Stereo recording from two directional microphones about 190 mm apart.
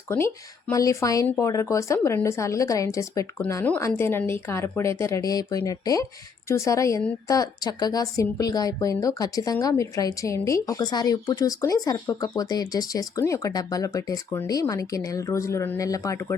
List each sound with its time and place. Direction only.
0.7 s a woman's voice: 15° left (ahead or behind)